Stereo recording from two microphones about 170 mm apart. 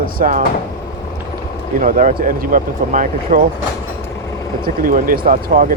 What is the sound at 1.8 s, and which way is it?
Speech, 50° right (ahead or behind).